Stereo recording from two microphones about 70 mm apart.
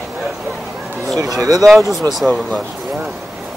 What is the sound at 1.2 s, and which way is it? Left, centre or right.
Speech, right.